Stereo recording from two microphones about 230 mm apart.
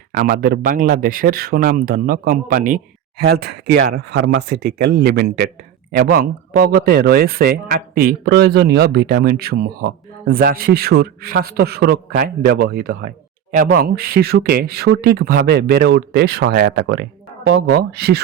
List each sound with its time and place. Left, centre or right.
0.2 s speech: right